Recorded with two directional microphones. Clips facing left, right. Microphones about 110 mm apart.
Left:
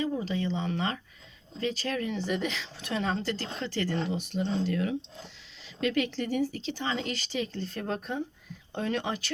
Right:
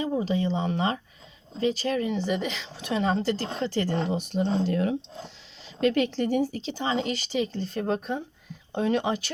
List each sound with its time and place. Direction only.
0.2 s speech: 20° right (ahead or behind)